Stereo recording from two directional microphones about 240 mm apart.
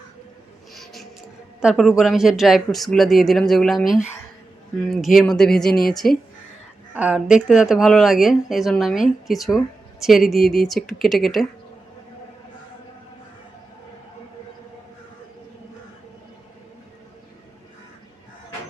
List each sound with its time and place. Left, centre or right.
0.7 s music: centre
1.6 s speech: centre